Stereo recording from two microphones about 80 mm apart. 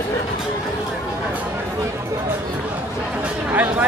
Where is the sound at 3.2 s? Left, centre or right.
Right.